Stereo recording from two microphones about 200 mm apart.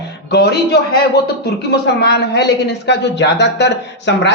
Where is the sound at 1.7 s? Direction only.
55° left (ahead or behind).